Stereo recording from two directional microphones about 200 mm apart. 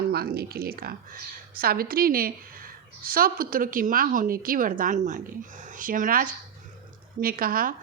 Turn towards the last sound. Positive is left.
turn(degrees=-45)  # may be behind; listen again after turning